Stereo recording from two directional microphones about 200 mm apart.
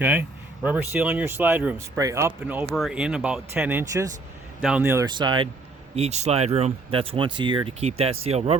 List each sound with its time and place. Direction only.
0.0 s speech: 10° right (ahead or behind)
6.0 s speech: 35° right (ahead or behind)